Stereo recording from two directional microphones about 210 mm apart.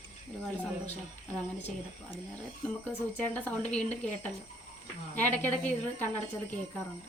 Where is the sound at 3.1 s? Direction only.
5° left (ahead or behind).